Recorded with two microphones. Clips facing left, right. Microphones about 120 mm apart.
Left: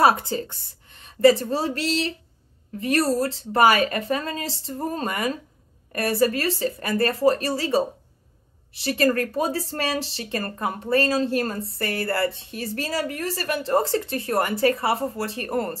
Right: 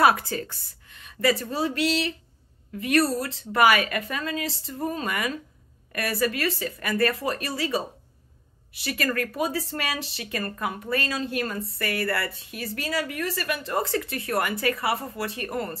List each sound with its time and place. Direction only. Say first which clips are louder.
0.0 s a woman's voice: left 2 dB; 25° left (ahead or behind)